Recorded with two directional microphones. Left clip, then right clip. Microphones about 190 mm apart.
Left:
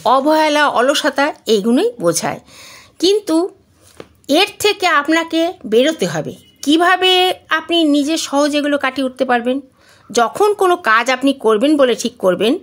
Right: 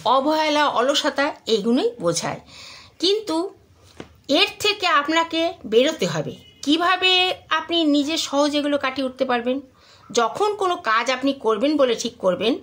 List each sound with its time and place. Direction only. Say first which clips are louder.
0.0 s speech: left 6 dB; 40° left (ahead or behind)